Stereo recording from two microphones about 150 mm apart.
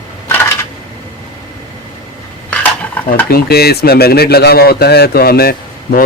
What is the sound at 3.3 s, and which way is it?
Speech, 90° left.